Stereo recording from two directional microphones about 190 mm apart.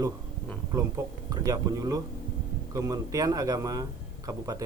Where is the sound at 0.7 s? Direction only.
20° right (ahead or behind).